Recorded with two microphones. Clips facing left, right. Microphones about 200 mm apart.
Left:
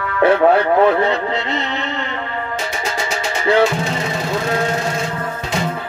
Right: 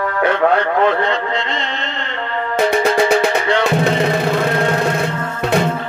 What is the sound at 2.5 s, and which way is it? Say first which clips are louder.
Music: right 13 dB; 60° right (ahead or behind).